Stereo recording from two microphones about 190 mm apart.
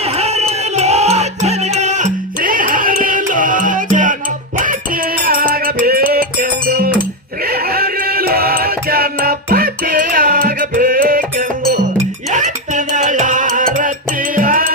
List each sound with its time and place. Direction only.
0.0 s music: 35° right (ahead or behind)
5.1 s music: 50° right (ahead or behind)